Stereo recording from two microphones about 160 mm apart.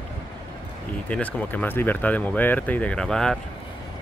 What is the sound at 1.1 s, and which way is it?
Speech, 10° left (ahead or behind).